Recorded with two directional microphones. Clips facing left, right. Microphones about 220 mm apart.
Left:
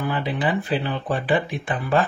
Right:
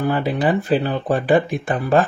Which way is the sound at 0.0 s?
45° right (ahead or behind).